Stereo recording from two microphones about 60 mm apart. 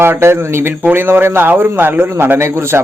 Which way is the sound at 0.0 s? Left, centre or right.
Right.